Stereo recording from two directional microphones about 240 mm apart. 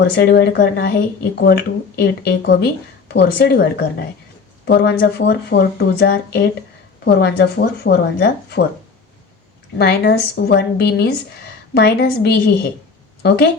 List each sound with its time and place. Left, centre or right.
0.2 s speech: left
9.7 s speech: left